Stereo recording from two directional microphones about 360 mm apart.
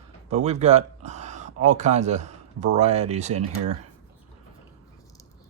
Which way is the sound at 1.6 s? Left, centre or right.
Centre.